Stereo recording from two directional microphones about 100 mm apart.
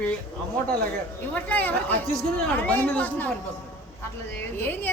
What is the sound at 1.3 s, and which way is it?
Speech, 15° left (ahead or behind).